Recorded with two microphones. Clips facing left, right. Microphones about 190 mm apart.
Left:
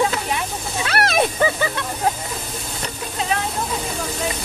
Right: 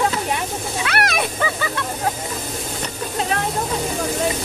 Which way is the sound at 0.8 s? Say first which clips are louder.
Left 3 dB; 30° left (ahead or behind).